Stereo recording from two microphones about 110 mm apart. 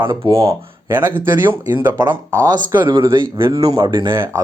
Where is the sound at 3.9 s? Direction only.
40° right (ahead or behind).